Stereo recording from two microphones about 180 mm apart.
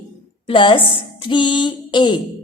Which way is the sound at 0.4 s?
25° left (ahead or behind).